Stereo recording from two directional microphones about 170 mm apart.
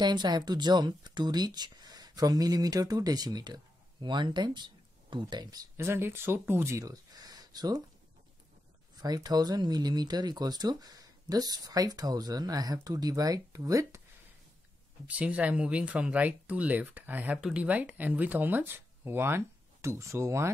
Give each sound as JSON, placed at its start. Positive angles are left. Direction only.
{"t": 0.0, "sound": "speech", "side_deg": -25}
{"t": 9.0, "sound": "speech", "side_deg": -25}
{"t": 15.0, "sound": "speech", "side_deg": -10}